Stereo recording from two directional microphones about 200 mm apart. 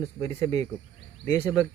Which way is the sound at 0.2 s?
15° left (ahead or behind).